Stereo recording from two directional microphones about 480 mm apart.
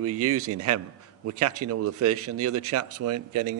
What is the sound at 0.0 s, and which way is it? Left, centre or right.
Speech, right.